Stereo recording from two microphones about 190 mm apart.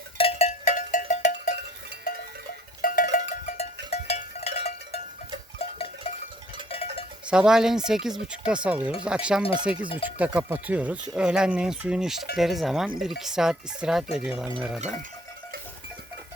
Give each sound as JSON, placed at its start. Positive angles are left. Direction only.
{"t": 0.2, "sound": "cowbell", "side_deg": 30}
{"t": 2.8, "sound": "cowbell", "side_deg": 45}
{"t": 7.3, "sound": "speech", "side_deg": -5}